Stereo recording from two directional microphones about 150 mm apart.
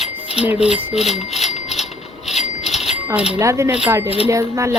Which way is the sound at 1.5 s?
45° left (ahead or behind).